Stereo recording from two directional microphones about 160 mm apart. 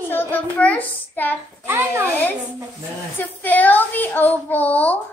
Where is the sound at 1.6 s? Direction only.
15° right (ahead or behind).